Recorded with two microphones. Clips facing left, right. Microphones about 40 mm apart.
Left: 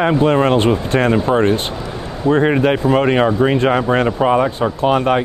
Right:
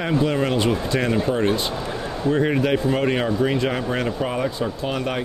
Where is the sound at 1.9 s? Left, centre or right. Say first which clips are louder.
Left 7 dB; left.